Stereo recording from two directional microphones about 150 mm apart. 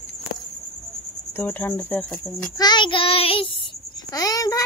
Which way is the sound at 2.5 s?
30° left (ahead or behind).